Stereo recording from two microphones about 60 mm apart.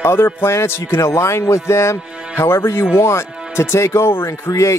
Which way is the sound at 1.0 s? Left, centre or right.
Left.